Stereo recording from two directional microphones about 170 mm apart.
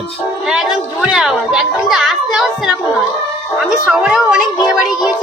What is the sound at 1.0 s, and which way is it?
Speech, 5° right (ahead or behind).